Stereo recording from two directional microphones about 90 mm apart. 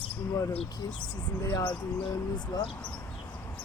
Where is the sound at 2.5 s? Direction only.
50° left (ahead or behind).